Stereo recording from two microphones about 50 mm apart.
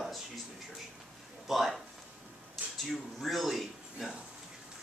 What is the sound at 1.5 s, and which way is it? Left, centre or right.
Speech, centre.